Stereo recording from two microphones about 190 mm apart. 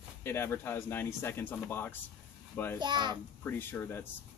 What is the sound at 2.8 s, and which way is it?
Speech, 25° right (ahead or behind).